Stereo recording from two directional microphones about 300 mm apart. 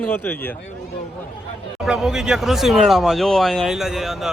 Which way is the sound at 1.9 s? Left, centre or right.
Centre.